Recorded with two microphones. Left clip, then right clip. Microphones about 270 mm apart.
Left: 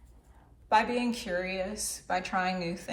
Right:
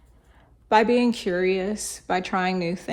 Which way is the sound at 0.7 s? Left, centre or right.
Right.